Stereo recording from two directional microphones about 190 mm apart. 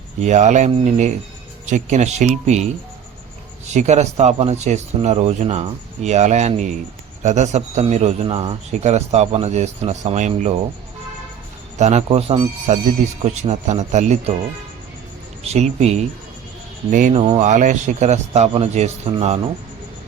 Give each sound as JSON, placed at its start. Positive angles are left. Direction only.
{"t": 0.2, "sound": "a man's voice", "side_deg": -40}
{"t": 3.8, "sound": "a man's voice", "side_deg": -35}
{"t": 11.8, "sound": "a man's voice", "side_deg": -35}
{"t": 12.7, "sound": "a man's voice", "side_deg": -35}
{"t": 15.5, "sound": "a man's voice", "side_deg": -35}
{"t": 17.2, "sound": "a man's voice", "side_deg": -30}